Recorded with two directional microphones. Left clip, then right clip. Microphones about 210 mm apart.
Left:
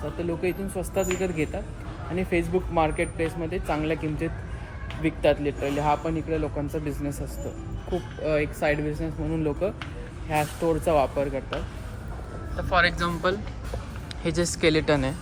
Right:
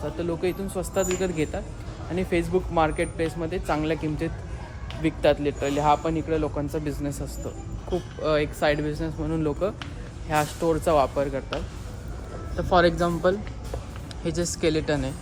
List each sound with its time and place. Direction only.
0.2 s a man's voice: 5° right (ahead or behind)
12.7 s speech: 20° right (ahead or behind)
14.3 s speech: 5° right (ahead or behind)